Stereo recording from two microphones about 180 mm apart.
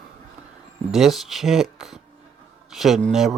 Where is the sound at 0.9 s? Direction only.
Centre (ahead or behind).